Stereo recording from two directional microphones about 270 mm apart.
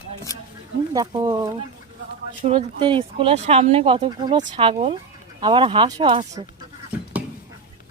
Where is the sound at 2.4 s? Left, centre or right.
Centre.